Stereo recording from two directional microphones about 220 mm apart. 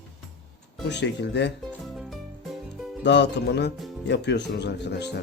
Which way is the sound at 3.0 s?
50° left (ahead or behind).